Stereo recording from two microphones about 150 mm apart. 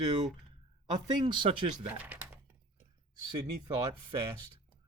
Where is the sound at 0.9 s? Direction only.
30° right (ahead or behind).